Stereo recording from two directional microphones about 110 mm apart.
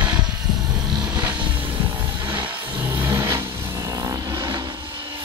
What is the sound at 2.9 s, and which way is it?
Vehicle, 20° right (ahead or behind).